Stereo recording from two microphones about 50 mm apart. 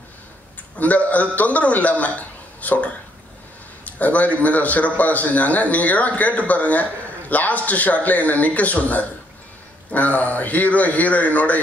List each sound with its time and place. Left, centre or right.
0.7 s a man's voice: left